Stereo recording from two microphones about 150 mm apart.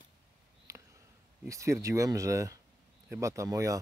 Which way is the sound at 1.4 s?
20° right (ahead or behind).